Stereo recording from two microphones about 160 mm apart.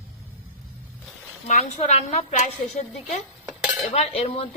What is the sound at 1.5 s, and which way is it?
A woman's voice, 45° left (ahead or behind).